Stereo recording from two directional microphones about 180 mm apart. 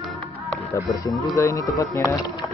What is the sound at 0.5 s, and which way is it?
Speech, 15° left (ahead or behind).